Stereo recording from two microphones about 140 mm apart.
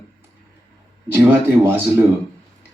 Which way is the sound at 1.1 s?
15° right (ahead or behind).